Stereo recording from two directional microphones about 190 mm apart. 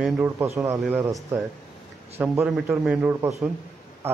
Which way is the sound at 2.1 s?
10° right (ahead or behind).